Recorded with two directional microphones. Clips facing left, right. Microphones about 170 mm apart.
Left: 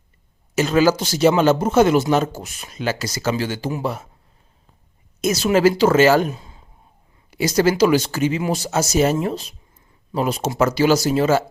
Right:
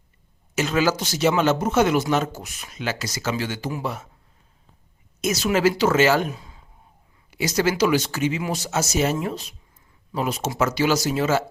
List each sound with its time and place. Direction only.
0.5 s speech: 35° left (ahead or behind)
5.2 s speech: 30° left (ahead or behind)
6.3 s a sound: 25° left (ahead or behind)
7.3 s speech: 35° left (ahead or behind)